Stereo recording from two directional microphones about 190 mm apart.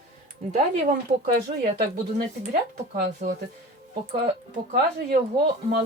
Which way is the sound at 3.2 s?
50° right (ahead or behind).